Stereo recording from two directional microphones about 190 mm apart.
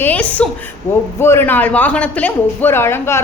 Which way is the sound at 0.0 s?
10° left (ahead or behind).